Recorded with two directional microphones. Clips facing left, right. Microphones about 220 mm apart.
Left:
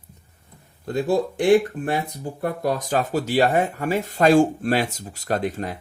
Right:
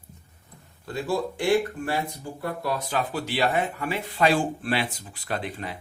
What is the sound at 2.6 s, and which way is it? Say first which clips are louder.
Speech: left 5 dB; 45° left (ahead or behind).